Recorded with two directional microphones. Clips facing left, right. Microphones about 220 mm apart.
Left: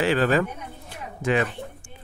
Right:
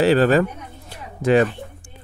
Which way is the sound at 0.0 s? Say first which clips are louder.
Right 6 dB; 40° right (ahead or behind).